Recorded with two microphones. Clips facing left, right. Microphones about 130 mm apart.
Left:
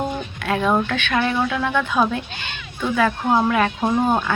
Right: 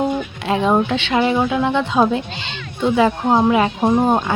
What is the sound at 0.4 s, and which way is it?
A woman's voice, 25° right (ahead or behind).